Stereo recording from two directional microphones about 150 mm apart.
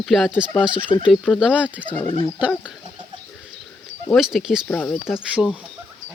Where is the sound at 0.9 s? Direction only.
35° left (ahead or behind).